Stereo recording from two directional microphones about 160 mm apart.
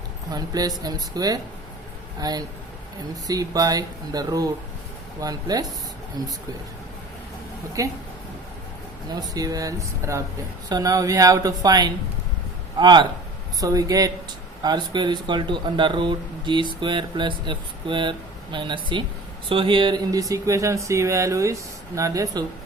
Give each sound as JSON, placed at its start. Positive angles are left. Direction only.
{"t": 0.3, "sound": "speech", "side_deg": -25}
{"t": 7.8, "sound": "speech", "side_deg": -20}
{"t": 9.3, "sound": "speech", "side_deg": -20}